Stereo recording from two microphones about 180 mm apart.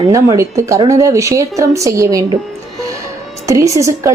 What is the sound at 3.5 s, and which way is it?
Speech, 15° right (ahead or behind).